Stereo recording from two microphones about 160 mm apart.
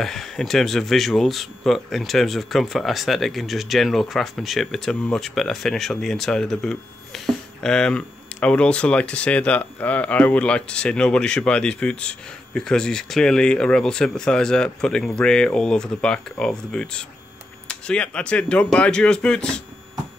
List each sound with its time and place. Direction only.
0.0 s speech: centre (ahead or behind)